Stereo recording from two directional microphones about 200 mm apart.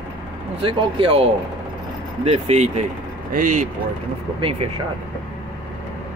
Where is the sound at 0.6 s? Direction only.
25° right (ahead or behind).